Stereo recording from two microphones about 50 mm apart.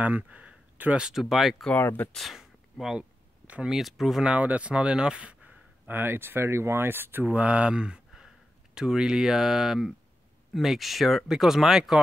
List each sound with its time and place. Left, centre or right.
0.0 s speech: right
0.9 s speech: centre
1.3 s speech: centre
1.8 s speech: left
2.3 s a sound: centre
3.0 s a sound: right
3.6 s speech: centre
4.2 s speech: right
5.9 s speech: right
7.3 s speech: right; by 12.0 s centre